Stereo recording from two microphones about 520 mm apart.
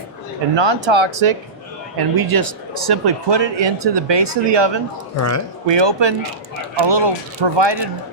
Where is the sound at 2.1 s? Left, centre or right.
Right.